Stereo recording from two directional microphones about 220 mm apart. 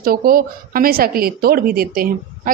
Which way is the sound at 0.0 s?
40° right (ahead or behind).